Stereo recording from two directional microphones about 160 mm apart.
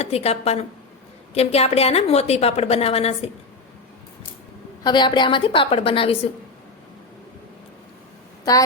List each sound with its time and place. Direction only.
0.0 s a woman's voice: 40° left (ahead or behind)
4.8 s a woman's voice: 30° left (ahead or behind)